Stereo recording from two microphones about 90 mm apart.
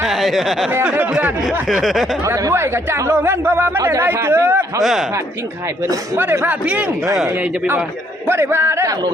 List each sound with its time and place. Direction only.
0.0 s a sound: centre (ahead or behind)
1.8 s a man's voice: centre (ahead or behind)
2.2 s speech: 35° right (ahead or behind)
4.8 s a man's voice: centre (ahead or behind)
6.4 s speech: 20° right (ahead or behind)
8.3 s speech: 25° right (ahead or behind)